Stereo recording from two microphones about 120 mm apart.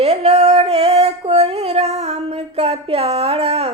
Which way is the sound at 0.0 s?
60° right (ahead or behind).